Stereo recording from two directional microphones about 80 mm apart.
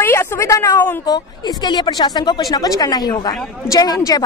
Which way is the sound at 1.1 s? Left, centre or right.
Left.